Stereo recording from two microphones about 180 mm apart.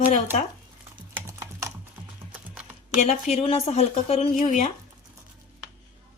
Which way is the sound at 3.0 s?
45° left (ahead or behind).